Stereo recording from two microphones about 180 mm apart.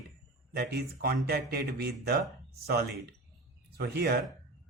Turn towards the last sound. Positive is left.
turn(degrees=-60)  # may be behind; listen again after turning